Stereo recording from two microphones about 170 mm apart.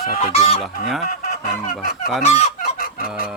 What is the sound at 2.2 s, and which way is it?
Fowl, 40° left (ahead or behind).